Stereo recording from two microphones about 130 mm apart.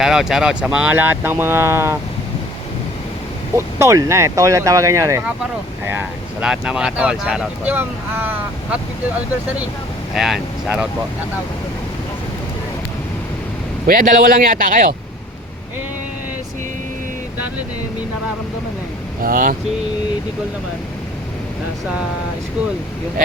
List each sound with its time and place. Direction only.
0.0 s speech: 5° right (ahead or behind); by 2.0 s 20° right (ahead or behind)
3.5 s speech: 20° right (ahead or behind)
6.4 s speech: 5° right (ahead or behind)
10.2 s speech: 5° right (ahead or behind)
13.8 s speech: 90° right
19.2 s speech: 90° right